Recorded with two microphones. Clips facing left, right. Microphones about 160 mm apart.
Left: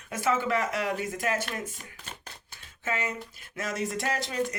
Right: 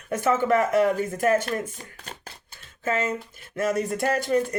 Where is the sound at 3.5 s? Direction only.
40° right (ahead or behind).